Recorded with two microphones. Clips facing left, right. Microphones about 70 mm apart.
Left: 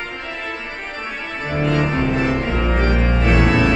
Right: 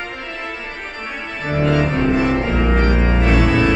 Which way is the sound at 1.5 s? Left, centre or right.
Centre.